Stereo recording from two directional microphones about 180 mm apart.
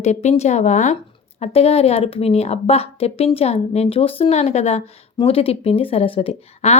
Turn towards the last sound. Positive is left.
turn(degrees=35)  # may be behind; listen again after turning